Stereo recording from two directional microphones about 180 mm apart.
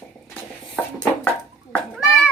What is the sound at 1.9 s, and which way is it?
Cat, centre (ahead or behind).